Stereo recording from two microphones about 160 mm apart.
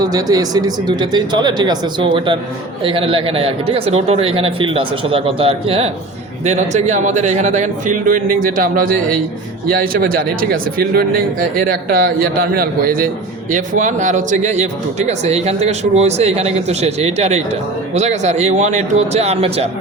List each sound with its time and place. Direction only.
0.0 s a man's voice: 25° right (ahead or behind); by 19.6 s 40° right (ahead or behind)